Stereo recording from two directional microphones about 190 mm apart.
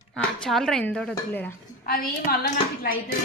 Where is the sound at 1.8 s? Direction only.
55° left (ahead or behind).